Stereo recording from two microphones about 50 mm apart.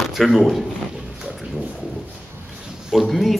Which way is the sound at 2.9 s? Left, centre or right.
Centre.